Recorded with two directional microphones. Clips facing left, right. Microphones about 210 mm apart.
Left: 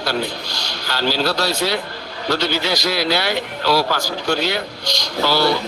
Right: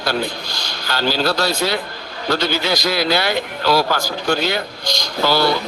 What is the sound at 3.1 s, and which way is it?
Speech, 50° right (ahead or behind).